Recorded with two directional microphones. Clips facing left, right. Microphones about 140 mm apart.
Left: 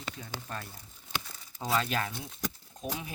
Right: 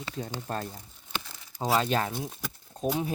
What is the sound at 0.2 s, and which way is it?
Speech, 40° right (ahead or behind).